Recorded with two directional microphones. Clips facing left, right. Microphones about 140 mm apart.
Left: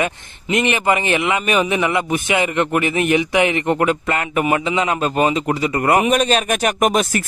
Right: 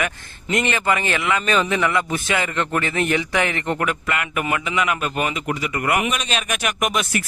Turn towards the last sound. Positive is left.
turn(degrees=40)  # may be behind; listen again after turning